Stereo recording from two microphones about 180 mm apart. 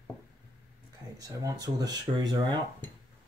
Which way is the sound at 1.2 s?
20° right (ahead or behind).